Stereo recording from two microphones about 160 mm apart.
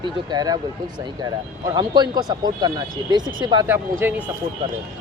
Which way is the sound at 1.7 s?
25° right (ahead or behind).